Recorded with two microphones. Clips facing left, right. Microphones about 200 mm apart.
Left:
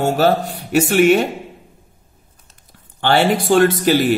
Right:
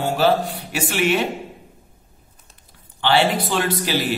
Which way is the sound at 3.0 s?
50° left (ahead or behind).